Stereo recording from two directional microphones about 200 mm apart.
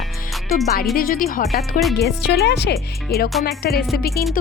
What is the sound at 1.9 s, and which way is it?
Speech, 55° left (ahead or behind).